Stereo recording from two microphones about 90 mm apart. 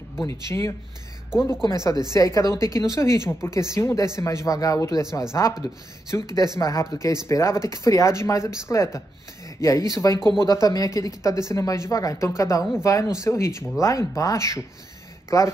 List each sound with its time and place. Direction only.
0.3 s speech: 35° left (ahead or behind)